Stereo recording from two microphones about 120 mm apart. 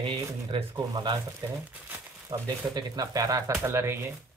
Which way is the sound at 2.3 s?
30° right (ahead or behind).